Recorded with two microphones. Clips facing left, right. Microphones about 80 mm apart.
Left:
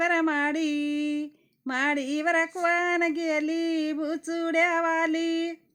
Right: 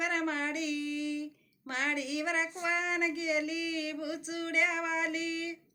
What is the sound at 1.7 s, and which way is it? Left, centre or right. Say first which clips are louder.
Child singing: left 7 dB; left.